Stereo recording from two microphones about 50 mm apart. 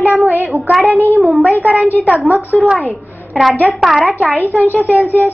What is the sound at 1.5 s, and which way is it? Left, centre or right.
Speech, right.